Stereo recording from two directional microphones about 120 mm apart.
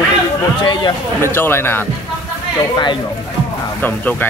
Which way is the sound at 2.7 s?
40° left (ahead or behind).